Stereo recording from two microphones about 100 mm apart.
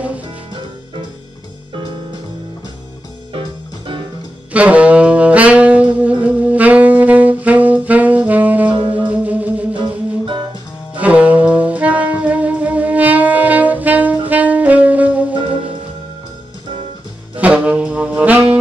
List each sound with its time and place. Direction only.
3.3 s music: 55° right (ahead or behind)
4.5 s saxophone: 15° right (ahead or behind)
8.9 s music: 15° right (ahead or behind)
11.0 s saxophone: 15° right (ahead or behind)
17.4 s saxophone: 15° right (ahead or behind)